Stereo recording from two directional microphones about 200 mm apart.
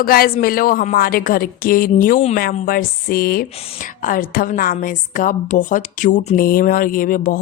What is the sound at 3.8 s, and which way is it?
A woman's voice, 40° left (ahead or behind).